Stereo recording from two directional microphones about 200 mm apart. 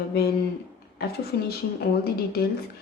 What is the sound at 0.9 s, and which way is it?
Speech, 50° left (ahead or behind).